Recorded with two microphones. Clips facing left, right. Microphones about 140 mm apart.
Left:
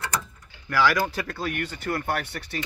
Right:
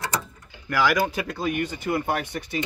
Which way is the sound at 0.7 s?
15° right (ahead or behind).